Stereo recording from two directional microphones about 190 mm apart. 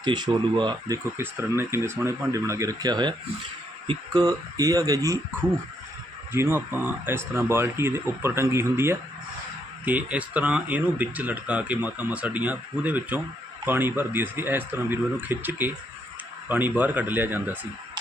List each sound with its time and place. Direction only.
0.0 s speech: 25° right (ahead or behind)